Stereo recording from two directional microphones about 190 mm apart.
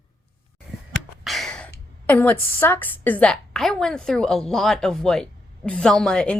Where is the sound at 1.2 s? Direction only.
Centre (ahead or behind).